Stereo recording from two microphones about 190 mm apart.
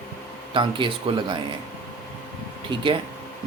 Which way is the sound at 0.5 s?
25° right (ahead or behind).